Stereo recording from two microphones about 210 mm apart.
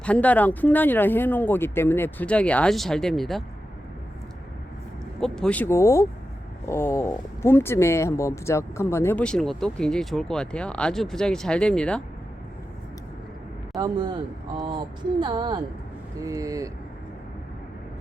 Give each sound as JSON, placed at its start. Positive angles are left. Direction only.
{"t": 0.0, "sound": "speech", "side_deg": 5}
{"t": 5.2, "sound": "speech", "side_deg": 5}
{"t": 13.7, "sound": "a woman's voice", "side_deg": -20}